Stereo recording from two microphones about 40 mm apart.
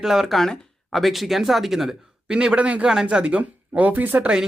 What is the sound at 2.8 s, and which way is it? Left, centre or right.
Speech, centre.